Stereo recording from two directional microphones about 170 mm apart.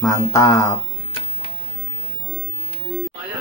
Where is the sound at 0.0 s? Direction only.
20° left (ahead or behind).